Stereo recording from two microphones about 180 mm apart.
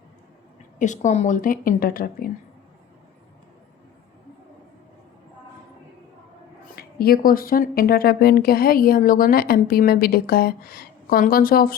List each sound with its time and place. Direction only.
0.8 s a woman's voice: 45° left (ahead or behind)
6.7 s speech: 60° left (ahead or behind)